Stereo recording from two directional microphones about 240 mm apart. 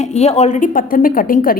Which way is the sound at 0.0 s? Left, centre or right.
Left.